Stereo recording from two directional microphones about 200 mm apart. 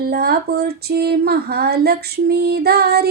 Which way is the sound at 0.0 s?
50° right (ahead or behind).